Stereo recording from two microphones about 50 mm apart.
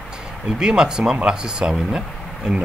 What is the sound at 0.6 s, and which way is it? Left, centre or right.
Speech, centre.